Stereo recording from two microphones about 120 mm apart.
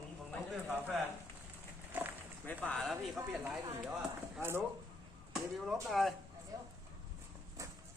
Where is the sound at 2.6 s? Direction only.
5° left (ahead or behind).